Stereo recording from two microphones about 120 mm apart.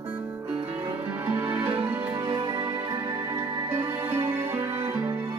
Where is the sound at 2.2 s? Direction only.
45° right (ahead or behind).